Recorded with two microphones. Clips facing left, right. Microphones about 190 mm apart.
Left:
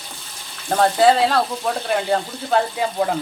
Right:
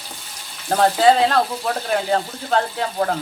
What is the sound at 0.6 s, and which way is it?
Speech, centre (ahead or behind).